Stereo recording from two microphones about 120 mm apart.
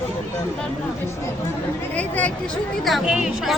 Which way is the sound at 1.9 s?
10° left (ahead or behind).